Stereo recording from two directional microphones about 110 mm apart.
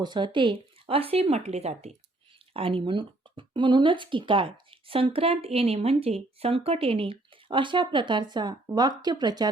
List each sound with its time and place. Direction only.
0.0 s speech: 45° right (ahead or behind); by 2.0 s 75° right (ahead or behind)
2.5 s speech: 55° right (ahead or behind); by 9.5 s 40° right (ahead or behind)